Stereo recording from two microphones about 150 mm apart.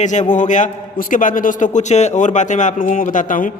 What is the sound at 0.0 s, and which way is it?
A man's voice, 55° left (ahead or behind).